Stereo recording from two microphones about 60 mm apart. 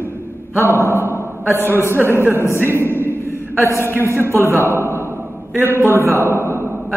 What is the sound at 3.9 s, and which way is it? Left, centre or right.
A man's voice, right.